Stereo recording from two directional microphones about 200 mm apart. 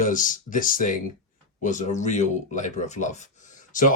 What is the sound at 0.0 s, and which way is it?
Speech, 40° left (ahead or behind).